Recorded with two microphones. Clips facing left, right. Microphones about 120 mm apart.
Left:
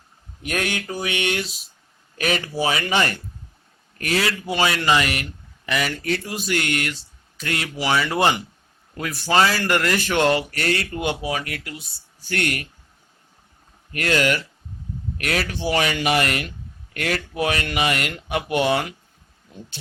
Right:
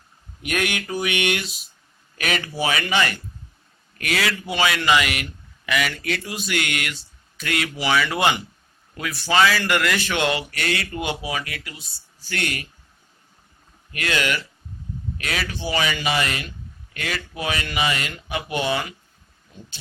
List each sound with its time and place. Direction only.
0.4 s speech: 35° left (ahead or behind); by 12.6 s 50° left (ahead or behind)
13.9 s speech: 45° left (ahead or behind)
15.2 s speech: 55° left (ahead or behind)